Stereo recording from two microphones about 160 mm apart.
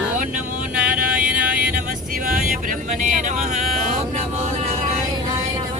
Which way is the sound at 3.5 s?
50° right (ahead or behind).